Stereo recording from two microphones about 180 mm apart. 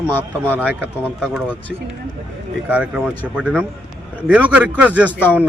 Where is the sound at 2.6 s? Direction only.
5° right (ahead or behind).